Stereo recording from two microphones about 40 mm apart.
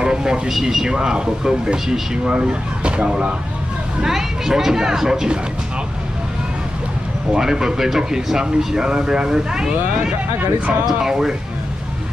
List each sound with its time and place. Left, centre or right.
0.0 s speech: centre
4.0 s speech: centre
7.3 s speech: centre
10.9 s speech: centre